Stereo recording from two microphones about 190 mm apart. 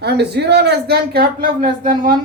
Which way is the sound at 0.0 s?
60° right (ahead or behind).